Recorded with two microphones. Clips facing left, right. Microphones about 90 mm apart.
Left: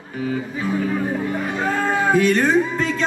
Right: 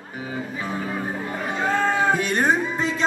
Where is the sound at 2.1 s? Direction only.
25° right (ahead or behind).